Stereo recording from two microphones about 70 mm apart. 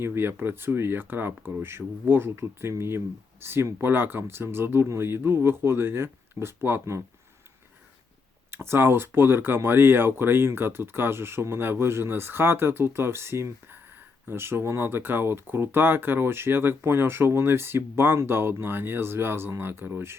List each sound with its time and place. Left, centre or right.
0.0 s speech: right
8.4 s speech: right